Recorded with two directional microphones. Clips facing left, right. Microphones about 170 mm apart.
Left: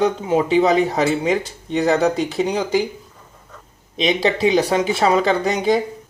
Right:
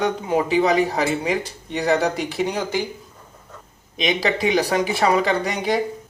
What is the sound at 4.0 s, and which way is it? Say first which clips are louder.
Speech: left 4 dB; 30° left (ahead or behind).